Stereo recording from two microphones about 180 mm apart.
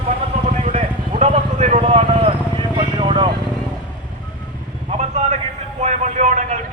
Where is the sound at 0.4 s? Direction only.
40° right (ahead or behind); by 3.2 s 25° right (ahead or behind).